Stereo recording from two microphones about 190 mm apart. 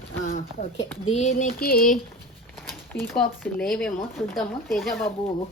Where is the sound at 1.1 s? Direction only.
40° left (ahead or behind).